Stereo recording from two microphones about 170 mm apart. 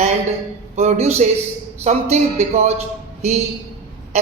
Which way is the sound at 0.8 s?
40° right (ahead or behind).